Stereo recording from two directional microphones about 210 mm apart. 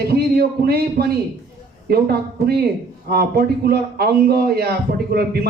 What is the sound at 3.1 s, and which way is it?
A man's voice, 45° right (ahead or behind).